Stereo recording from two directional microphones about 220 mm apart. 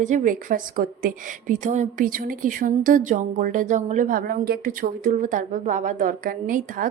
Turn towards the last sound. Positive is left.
turn(degrees=-35)  # may be behind; listen again after turning